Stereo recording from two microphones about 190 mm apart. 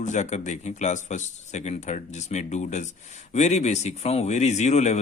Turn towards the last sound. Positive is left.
turn(degrees=35)  # may be behind; listen again after turning